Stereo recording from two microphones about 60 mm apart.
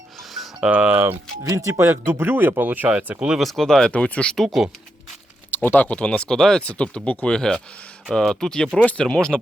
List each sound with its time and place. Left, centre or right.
0.6 s speech: right
1.5 s speech: right
3.4 s speech: centre
3.9 s speech: centre
4.4 s speech: centre
5.5 s speech: left; by 6.6 s centre
6.6 s speech: left